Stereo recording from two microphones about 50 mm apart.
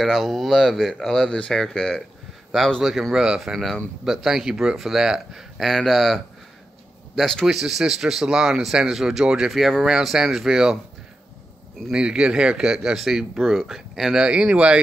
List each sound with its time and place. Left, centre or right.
0.0 s speech: centre
2.8 s speech: centre
7.4 s speech: centre
9.5 s speech: centre
11.9 s speech: centre
14.2 s speech: centre